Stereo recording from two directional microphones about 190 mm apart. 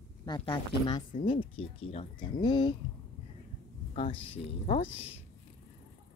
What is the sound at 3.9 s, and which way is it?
Speech, 30° left (ahead or behind).